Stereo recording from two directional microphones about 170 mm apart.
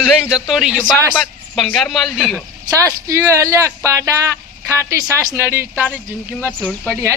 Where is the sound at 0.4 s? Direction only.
Centre (ahead or behind).